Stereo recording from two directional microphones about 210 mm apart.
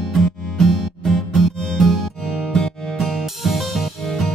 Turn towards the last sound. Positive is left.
turn(degrees=0)  # may be behind; listen again after turning